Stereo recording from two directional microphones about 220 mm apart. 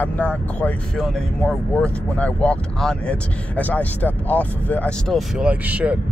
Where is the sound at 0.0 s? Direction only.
5° left (ahead or behind).